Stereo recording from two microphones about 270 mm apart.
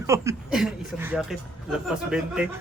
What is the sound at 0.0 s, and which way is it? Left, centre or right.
A man's voice, centre.